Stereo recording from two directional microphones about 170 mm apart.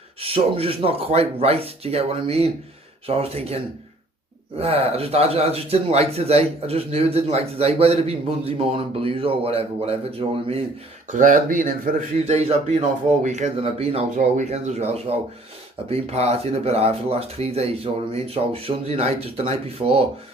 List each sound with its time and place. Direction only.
0.2 s speech: 35° right (ahead or behind)
11.1 s speech: 50° right (ahead or behind); by 20.0 s 35° right (ahead or behind)